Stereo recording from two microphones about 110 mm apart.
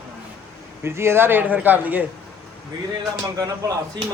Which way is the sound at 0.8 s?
20° right (ahead or behind).